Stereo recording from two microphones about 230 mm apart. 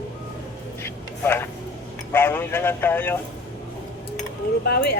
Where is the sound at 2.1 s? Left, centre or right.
Centre.